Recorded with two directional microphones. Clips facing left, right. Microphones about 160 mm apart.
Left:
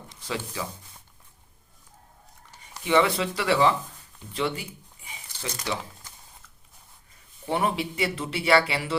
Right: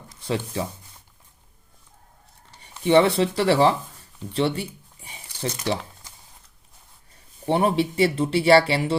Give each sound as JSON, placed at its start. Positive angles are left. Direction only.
{"t": 0.3, "sound": "speech", "side_deg": -30}
{"t": 2.6, "sound": "speech", "side_deg": -30}
{"t": 5.0, "sound": "a sound", "side_deg": -35}
{"t": 7.4, "sound": "speech", "side_deg": -30}